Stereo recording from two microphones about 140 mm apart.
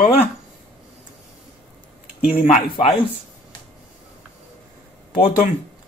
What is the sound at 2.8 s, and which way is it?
Speech, 40° left (ahead or behind).